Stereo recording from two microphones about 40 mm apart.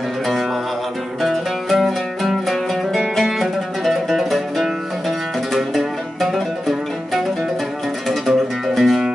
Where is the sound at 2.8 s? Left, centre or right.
Centre.